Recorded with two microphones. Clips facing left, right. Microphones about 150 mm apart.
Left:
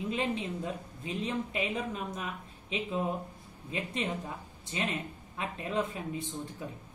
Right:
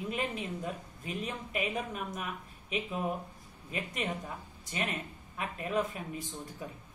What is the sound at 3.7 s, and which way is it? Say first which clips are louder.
Speech: left 2 dB; 30° left (ahead or behind).